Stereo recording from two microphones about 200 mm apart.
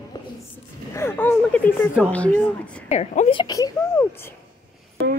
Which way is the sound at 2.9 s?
35° left (ahead or behind).